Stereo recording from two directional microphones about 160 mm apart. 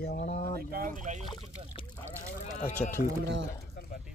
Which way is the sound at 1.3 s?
30° left (ahead or behind).